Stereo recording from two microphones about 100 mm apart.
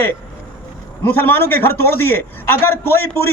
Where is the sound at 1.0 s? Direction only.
20° left (ahead or behind).